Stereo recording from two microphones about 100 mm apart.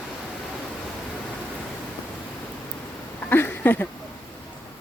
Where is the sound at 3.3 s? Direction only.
20° left (ahead or behind).